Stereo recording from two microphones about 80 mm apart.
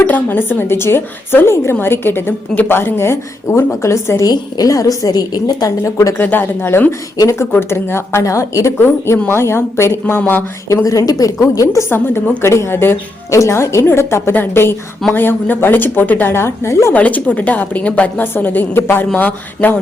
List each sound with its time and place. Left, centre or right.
0.0 s a woman's voice: left
4.3 s a woman's voice: left
5.8 s a woman's voice: left
6.1 s a woman's voice: left
7.2 s a woman's voice: left
8.2 s a woman's voice: left
10.2 s a woman's voice: centre
10.8 s a woman's voice: left
16.9 s a woman's voice: centre